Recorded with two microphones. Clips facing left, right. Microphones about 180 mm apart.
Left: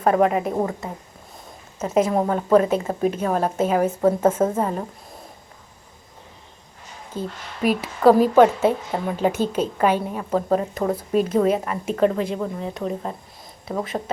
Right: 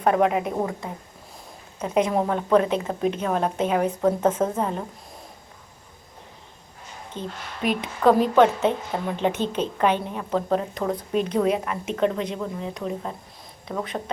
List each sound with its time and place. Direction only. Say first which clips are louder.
0.0 s a woman's voice: left 2 dB; centre (ahead or behind)
7.1 s a woman's voice: left 4 dB; 5° left (ahead or behind)